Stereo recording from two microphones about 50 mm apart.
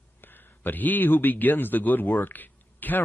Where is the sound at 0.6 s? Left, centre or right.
Left.